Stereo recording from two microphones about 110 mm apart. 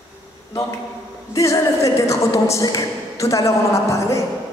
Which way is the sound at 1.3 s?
30° left (ahead or behind).